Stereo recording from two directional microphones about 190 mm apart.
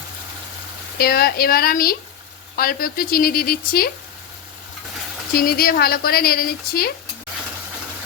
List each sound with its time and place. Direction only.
0.9 s speech: 55° left (ahead or behind)
5.4 s speech: 50° left (ahead or behind)